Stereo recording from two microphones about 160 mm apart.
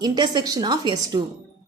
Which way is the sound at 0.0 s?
25° right (ahead or behind).